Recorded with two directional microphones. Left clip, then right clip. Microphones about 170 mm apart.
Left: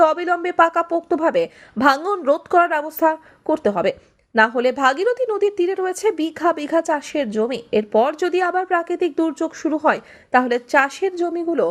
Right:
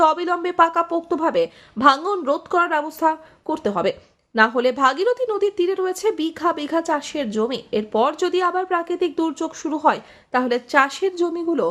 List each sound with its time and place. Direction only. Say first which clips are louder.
0.0 s speech: left 1 dB; 15° left (ahead or behind)